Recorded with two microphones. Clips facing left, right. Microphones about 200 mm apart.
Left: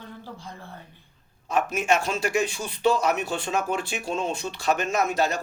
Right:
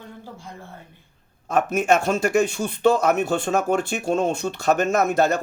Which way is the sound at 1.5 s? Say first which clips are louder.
Right 4 dB; 45° right (ahead or behind).